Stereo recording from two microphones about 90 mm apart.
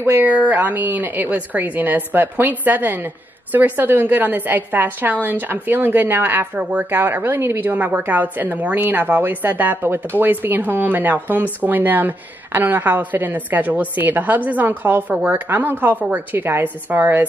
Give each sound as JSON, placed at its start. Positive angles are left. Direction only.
{"t": 0.0, "sound": "speech", "side_deg": -25}